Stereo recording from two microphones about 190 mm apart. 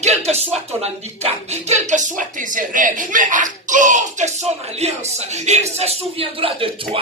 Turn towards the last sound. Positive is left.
turn(degrees=-30)  # may be behind; listen again after turning